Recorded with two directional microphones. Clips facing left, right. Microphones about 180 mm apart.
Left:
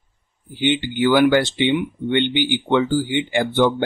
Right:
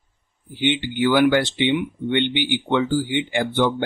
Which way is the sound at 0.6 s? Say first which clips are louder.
Left 2 dB; 40° left (ahead or behind).